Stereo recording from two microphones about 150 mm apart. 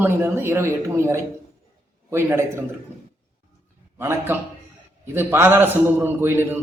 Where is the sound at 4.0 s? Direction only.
15° right (ahead or behind).